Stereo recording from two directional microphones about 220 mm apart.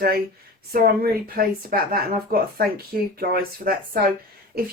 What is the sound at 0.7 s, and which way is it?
Speech, 40° right (ahead or behind).